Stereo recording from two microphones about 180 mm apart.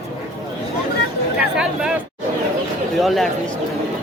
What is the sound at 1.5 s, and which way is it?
Speech, 5° right (ahead or behind).